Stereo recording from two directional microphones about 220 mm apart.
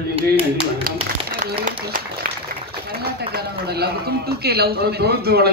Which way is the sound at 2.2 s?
45° right (ahead or behind).